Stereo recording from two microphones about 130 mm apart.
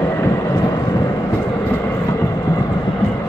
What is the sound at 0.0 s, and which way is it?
Vehicle, 20° left (ahead or behind).